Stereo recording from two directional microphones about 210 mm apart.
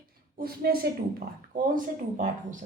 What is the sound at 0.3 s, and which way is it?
A woman's voice, 45° right (ahead or behind).